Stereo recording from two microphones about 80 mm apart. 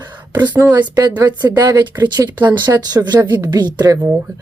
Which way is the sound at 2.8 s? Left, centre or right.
Right.